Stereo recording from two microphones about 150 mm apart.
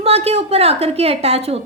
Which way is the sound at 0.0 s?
40° right (ahead or behind).